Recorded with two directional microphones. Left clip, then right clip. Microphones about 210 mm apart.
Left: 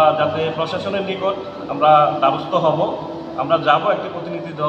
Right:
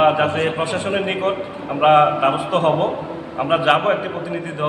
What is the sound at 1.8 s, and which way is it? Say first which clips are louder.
A man's voice: left 1 dB; 20° right (ahead or behind).